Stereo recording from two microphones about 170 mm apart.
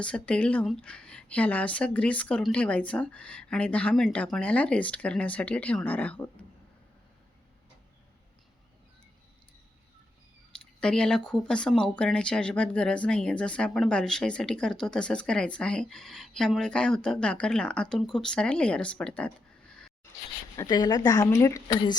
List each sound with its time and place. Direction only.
0.0 s speech: 5° left (ahead or behind)
10.8 s speech: 5° left (ahead or behind)
20.6 s a woman's voice: 25° left (ahead or behind)